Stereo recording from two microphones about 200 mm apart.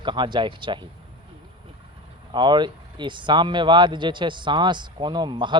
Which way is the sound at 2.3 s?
20° right (ahead or behind).